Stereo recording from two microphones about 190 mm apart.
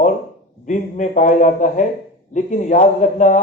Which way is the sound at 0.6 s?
40° left (ahead or behind).